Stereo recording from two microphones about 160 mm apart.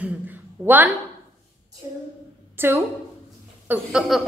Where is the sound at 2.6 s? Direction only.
15° right (ahead or behind).